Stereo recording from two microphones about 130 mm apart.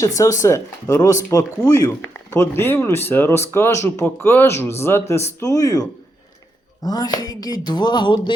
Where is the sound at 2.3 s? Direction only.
15° left (ahead or behind).